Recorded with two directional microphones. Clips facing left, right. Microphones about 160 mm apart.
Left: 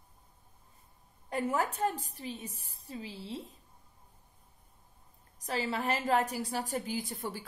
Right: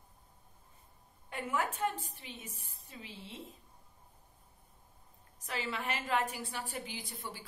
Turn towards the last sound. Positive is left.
turn(degrees=45)  # may be behind; listen again after turning